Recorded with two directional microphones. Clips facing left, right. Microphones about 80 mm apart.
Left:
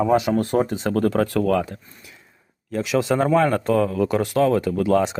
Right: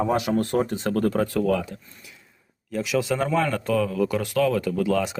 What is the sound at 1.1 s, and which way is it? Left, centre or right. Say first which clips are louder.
Speech: left 3 dB; left.